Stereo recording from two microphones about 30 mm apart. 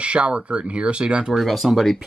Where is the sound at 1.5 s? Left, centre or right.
Centre.